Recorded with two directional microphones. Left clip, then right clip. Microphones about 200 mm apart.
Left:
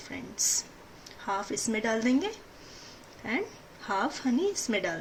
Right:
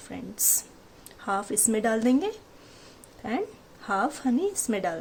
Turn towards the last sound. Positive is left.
turn(degrees=-40)  # may be behind; listen again after turning